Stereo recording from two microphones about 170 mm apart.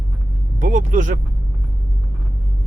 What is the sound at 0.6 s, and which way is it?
Speech, 45° right (ahead or behind).